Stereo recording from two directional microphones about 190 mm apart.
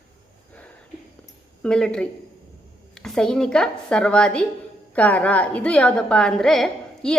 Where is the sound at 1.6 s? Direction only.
5° left (ahead or behind).